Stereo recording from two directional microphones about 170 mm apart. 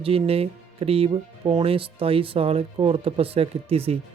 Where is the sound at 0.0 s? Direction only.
35° right (ahead or behind).